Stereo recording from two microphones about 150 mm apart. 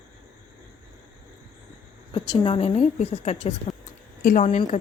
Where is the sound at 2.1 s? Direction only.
30° left (ahead or behind).